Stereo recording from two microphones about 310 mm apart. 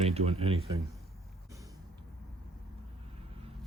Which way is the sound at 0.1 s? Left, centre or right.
Centre.